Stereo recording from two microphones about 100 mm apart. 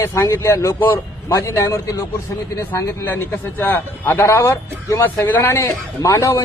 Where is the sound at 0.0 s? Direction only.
25° left (ahead or behind).